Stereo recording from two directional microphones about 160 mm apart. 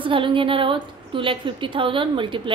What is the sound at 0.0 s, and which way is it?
A woman's voice, 30° right (ahead or behind).